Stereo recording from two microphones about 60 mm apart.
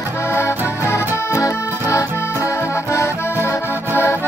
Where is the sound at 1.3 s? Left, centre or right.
Left.